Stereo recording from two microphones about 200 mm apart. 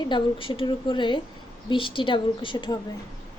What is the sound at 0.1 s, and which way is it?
A woman's voice, 25° left (ahead or behind).